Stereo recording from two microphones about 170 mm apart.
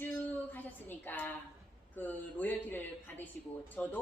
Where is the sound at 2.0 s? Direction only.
10° left (ahead or behind).